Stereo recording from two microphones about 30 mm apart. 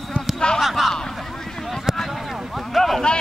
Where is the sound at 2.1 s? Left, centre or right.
Centre.